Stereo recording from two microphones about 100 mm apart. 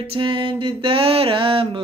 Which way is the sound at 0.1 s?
60° right (ahead or behind).